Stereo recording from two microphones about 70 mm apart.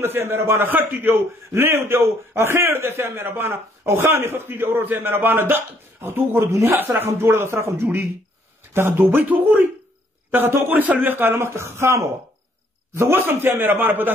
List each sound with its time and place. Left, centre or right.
0.0 s a man's voice: right
0.7 s a man's voice: right